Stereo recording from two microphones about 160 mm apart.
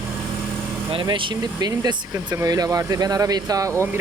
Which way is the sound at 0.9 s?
30° right (ahead or behind).